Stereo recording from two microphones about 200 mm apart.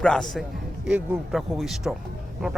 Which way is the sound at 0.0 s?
5° left (ahead or behind).